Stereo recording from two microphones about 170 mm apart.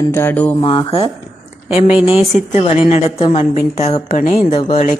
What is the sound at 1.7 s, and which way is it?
A woman's voice, 35° left (ahead or behind).